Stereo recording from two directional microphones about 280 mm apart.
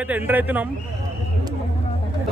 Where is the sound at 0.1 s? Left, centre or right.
Centre.